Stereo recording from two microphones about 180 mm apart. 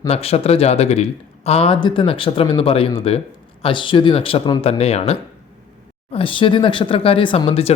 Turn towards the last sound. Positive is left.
turn(degrees=35)  # may be behind; listen again after turning